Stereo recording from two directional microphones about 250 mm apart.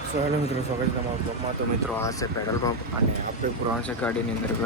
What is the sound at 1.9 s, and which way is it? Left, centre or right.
Speech, centre.